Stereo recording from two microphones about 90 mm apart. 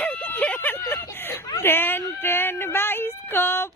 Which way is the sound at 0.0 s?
20° left (ahead or behind).